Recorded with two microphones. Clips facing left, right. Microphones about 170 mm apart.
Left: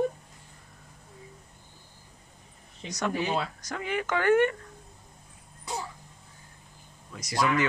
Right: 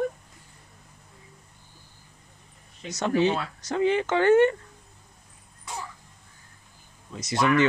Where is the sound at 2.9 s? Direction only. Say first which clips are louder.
Right 5 dB; 25° right (ahead or behind).